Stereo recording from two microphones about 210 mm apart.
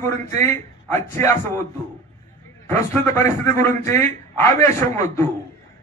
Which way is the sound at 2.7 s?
10° left (ahead or behind).